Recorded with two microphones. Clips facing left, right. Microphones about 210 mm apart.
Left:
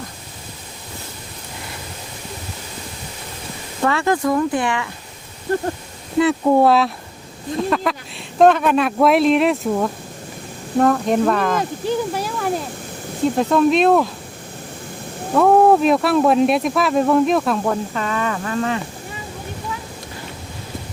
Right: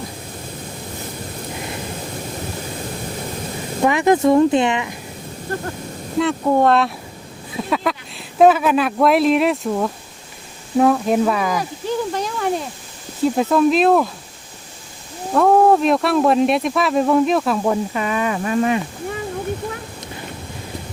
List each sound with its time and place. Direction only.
3.8 s speech: 15° right (ahead or behind)
6.1 s speech: 5° left (ahead or behind)
12.1 s a sound: 5° left (ahead or behind)
13.3 s speech: centre (ahead or behind)
15.4 s speech: centre (ahead or behind); by 18.8 s 15° right (ahead or behind)